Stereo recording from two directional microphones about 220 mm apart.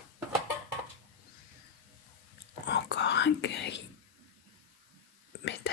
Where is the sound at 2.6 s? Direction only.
50° left (ahead or behind).